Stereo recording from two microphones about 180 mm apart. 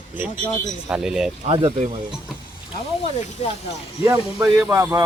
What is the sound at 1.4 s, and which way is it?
Speech, 30° right (ahead or behind).